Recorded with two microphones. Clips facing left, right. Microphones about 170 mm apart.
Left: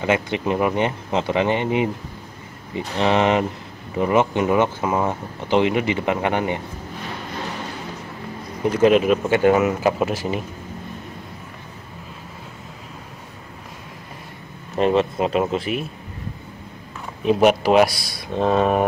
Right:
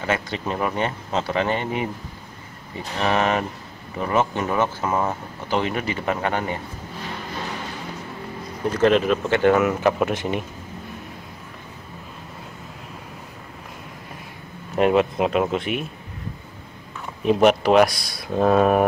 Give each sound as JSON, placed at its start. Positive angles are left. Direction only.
{"t": 0.0, "sound": "speech", "side_deg": 15}
{"t": 3.0, "sound": "speech", "side_deg": 20}
{"t": 8.6, "sound": "speech", "side_deg": 10}
{"t": 14.8, "sound": "speech", "side_deg": -5}
{"t": 17.2, "sound": "speech", "side_deg": 0}